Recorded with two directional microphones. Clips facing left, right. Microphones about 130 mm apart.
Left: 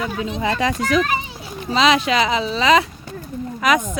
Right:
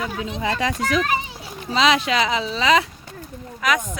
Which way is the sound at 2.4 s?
55° left (ahead or behind).